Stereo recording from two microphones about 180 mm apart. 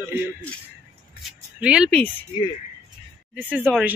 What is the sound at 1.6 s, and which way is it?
Speech, 5° right (ahead or behind).